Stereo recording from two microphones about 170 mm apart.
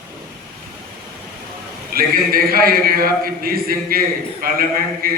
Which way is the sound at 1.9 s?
60° right (ahead or behind).